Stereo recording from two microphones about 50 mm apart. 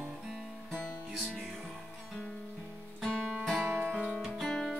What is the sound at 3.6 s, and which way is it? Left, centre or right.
Music, right.